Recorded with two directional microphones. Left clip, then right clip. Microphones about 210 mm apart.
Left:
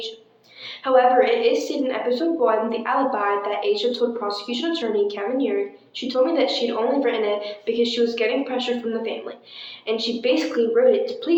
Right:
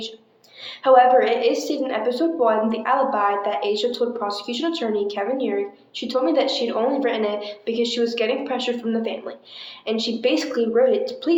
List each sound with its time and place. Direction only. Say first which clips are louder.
0.9 s a woman's voice: right 2 dB; 50° right (ahead or behind)